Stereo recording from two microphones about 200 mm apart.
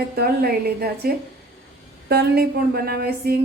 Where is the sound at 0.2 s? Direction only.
50° right (ahead or behind).